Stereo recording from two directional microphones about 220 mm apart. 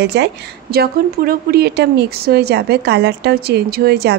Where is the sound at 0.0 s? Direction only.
50° right (ahead or behind).